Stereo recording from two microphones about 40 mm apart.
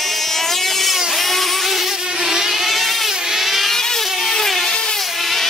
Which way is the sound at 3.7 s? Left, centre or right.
Centre.